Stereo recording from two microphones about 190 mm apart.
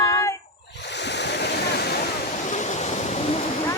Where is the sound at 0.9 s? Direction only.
65° left (ahead or behind).